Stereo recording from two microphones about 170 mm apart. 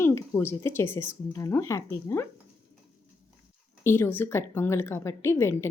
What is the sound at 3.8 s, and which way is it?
A woman's voice, 15° left (ahead or behind).